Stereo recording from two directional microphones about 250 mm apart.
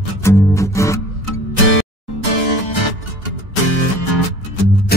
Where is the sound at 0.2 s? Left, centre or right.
Centre.